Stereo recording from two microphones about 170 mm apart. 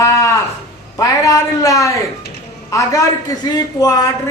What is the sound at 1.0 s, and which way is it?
A man's voice, 20° left (ahead or behind).